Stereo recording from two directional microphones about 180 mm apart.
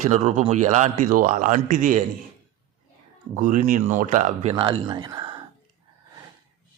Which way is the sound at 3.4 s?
45° right (ahead or behind).